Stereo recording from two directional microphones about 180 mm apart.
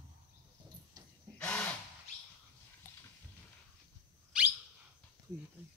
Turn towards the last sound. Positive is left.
turn(degrees=-5)  # may be behind; listen again after turning